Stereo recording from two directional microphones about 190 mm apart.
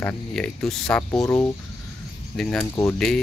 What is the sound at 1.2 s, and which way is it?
Speech, 15° left (ahead or behind).